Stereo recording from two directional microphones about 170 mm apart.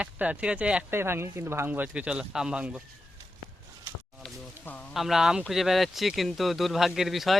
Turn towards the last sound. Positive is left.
turn(degrees=0)  # may be behind; listen again after turning